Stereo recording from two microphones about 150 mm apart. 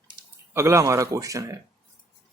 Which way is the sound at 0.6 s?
20° right (ahead or behind).